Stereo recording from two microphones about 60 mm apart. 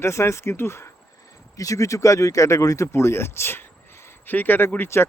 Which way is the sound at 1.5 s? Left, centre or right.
Left.